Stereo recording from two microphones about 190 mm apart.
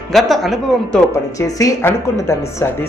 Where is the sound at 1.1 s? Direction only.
15° left (ahead or behind).